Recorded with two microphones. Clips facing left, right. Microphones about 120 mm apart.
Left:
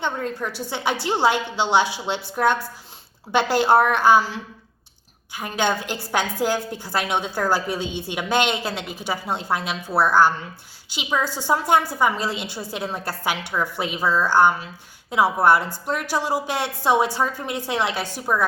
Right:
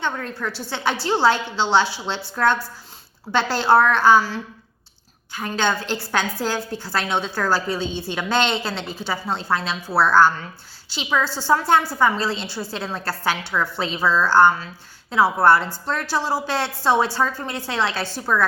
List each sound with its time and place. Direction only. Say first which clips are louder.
0.0 s a woman's voice: left 1 dB; 20° left (ahead or behind)